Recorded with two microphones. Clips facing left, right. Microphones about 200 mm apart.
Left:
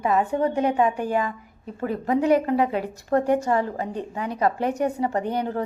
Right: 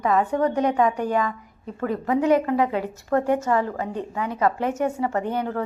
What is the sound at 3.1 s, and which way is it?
Speech, 35° left (ahead or behind).